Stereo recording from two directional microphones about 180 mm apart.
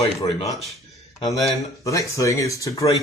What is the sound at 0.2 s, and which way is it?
Speech, 20° left (ahead or behind).